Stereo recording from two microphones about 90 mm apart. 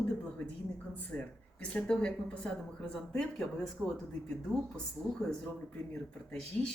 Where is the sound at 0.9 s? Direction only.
15° left (ahead or behind).